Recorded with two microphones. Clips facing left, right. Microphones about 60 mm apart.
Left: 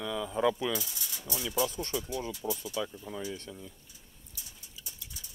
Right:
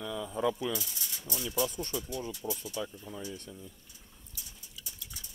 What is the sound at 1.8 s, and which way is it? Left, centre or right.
Speech, left.